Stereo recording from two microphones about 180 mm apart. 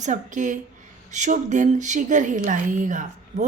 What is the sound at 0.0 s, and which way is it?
A woman's voice, 45° right (ahead or behind).